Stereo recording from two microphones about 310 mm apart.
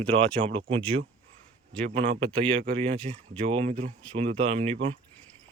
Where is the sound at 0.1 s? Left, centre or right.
Right.